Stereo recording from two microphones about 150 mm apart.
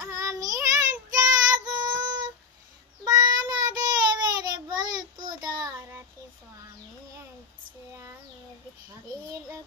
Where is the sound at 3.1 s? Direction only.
25° right (ahead or behind).